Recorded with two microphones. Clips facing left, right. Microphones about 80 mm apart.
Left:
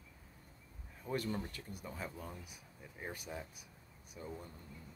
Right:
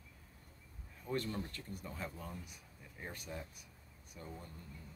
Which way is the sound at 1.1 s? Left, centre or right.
Centre.